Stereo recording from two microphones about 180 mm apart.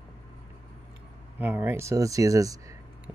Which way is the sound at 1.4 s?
10° right (ahead or behind).